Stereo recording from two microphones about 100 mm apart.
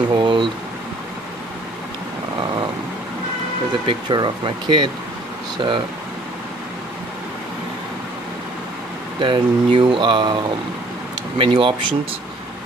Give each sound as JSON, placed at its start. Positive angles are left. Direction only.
{"t": 0.1, "sound": "speech", "side_deg": -55}
{"t": 3.8, "sound": "speech", "side_deg": -50}
{"t": 9.2, "sound": "speech", "side_deg": -60}